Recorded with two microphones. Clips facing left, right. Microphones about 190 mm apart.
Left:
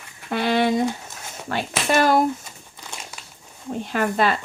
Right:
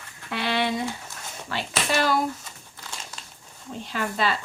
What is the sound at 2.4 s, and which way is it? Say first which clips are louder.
Crumpling: left 2 dB; 15° left (ahead or behind).